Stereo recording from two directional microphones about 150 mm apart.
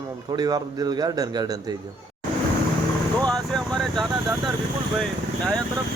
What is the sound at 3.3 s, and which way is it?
Vehicle, 5° left (ahead or behind).